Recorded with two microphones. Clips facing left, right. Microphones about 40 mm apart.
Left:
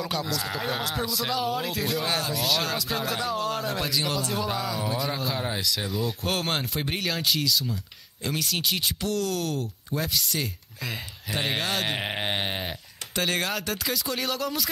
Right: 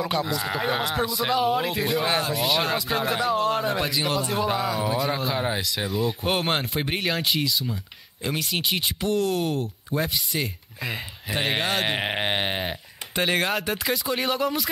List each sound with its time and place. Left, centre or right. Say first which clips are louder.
0.0 s speech: right 4 dB; centre